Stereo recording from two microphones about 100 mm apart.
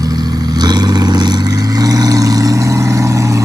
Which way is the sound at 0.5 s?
40° right (ahead or behind).